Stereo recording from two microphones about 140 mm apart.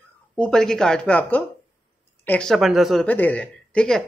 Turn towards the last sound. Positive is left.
turn(degrees=5)  # may be behind; listen again after turning